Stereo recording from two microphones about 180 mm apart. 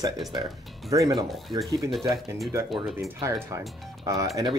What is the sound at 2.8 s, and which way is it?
Speech, centre (ahead or behind).